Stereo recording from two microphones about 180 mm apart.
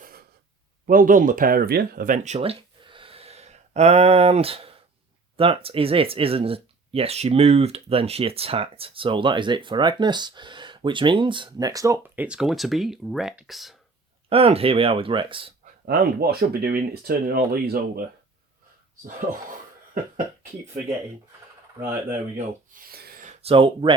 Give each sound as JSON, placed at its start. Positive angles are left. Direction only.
{"t": 0.0, "sound": "gasp", "side_deg": -60}
{"t": 0.9, "sound": "speech", "side_deg": -50}
{"t": 14.3, "sound": "speech", "side_deg": -35}
{"t": 15.9, "sound": "speech", "side_deg": -60}
{"t": 22.7, "sound": "a sound", "side_deg": -55}
{"t": 23.4, "sound": "speech", "side_deg": -30}